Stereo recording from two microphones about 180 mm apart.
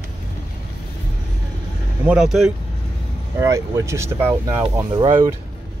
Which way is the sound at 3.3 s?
15° right (ahead or behind).